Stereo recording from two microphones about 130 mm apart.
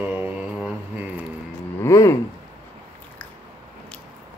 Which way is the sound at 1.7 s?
25° left (ahead or behind).